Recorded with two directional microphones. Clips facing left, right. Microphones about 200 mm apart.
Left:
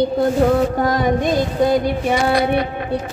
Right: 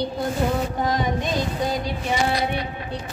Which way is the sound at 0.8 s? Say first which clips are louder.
Left 6 dB; 60° left (ahead or behind).